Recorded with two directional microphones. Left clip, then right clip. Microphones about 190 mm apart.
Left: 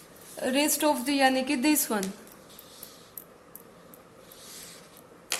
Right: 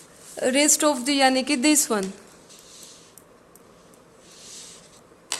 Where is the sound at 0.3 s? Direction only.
45° right (ahead or behind).